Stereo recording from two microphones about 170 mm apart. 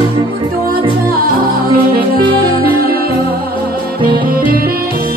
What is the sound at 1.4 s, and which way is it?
Music, 60° right (ahead or behind).